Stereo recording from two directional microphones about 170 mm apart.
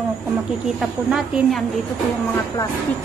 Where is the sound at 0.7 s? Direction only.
Centre (ahead or behind).